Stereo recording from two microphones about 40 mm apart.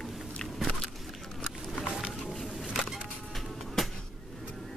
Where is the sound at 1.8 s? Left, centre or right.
Centre.